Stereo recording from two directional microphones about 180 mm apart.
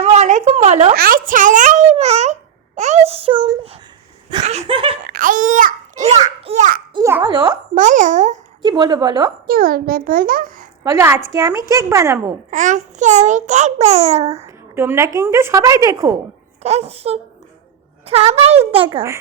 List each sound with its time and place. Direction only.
0.0 s a sound: 40° right (ahead or behind)
0.9 s a child's voice: 50° right (ahead or behind); by 4.9 s 30° right (ahead or behind)
5.0 s a child's voice: 50° right (ahead or behind)
6.9 s a woman's voice: 20° right (ahead or behind)
7.8 s a child's voice: 45° right (ahead or behind)
8.6 s a woman's voice: 25° right (ahead or behind)
9.5 s a child's voice: 55° right (ahead or behind)
10.8 s a woman's voice: 15° right (ahead or behind)
12.5 s a child's voice: 45° right (ahead or behind)
14.4 s a woman's voice: 15° right (ahead or behind)
16.6 s a child's voice: 35° right (ahead or behind)
18.9 s a woman's voice: 20° right (ahead or behind)